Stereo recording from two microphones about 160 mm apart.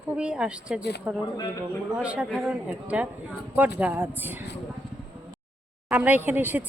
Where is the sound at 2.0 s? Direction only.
5° right (ahead or behind).